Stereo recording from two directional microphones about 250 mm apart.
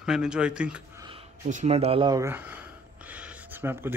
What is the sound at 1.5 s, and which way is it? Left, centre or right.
Speech, right.